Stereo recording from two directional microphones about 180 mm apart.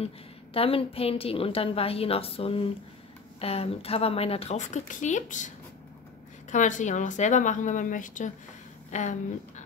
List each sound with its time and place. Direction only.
0.0 s a woman's voice: 30° left (ahead or behind)
6.5 s a woman's voice: 45° left (ahead or behind)